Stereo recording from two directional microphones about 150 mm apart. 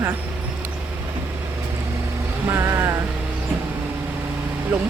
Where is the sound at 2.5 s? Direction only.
15° right (ahead or behind).